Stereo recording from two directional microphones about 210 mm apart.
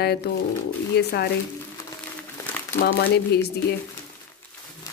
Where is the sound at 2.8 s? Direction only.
50° left (ahead or behind).